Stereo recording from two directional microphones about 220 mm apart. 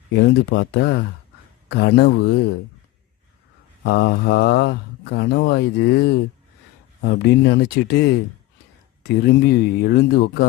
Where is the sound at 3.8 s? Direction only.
50° left (ahead or behind).